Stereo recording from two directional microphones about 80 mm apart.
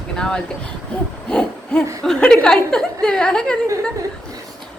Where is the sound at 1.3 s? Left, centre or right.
Centre.